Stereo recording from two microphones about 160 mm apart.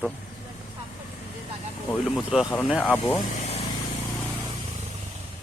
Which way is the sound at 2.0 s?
5° right (ahead or behind).